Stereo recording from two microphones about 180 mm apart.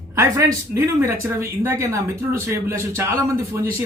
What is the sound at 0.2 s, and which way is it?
Speech, 15° right (ahead or behind).